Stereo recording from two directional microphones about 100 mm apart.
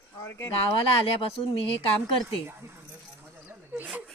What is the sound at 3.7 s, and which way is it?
Speech, 15° right (ahead or behind).